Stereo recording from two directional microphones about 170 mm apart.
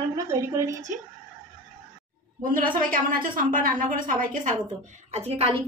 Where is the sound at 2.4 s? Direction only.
55° right (ahead or behind).